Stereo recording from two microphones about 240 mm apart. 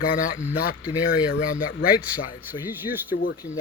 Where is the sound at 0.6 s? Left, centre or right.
Left.